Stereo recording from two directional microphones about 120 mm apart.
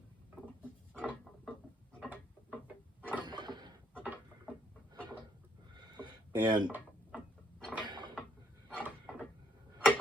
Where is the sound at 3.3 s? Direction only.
35° right (ahead or behind).